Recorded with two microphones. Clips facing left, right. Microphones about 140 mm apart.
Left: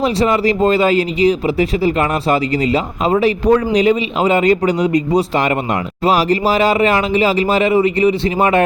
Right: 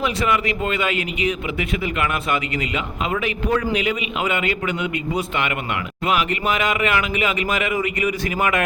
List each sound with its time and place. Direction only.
0.0 s speech: 35° left (ahead or behind)